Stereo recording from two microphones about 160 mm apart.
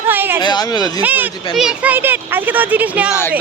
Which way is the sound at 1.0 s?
10° right (ahead or behind).